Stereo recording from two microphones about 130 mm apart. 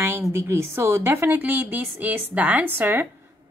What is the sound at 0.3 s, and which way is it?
A woman's voice, 20° right (ahead or behind).